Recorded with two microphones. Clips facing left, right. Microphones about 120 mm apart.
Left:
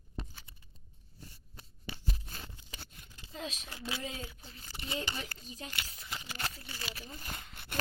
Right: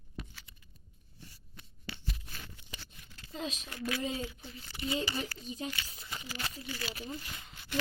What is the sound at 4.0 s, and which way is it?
Speech, 5° right (ahead or behind).